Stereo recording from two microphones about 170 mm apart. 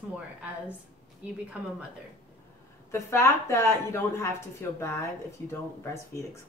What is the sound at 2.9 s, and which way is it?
Speech, 15° left (ahead or behind).